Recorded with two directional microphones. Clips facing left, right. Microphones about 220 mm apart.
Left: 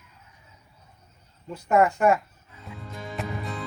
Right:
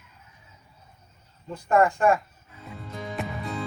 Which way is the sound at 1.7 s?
5° left (ahead or behind).